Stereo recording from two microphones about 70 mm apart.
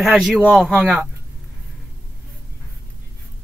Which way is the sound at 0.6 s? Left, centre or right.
Centre.